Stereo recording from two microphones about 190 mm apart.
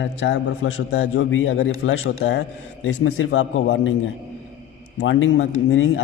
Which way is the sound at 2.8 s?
90° left.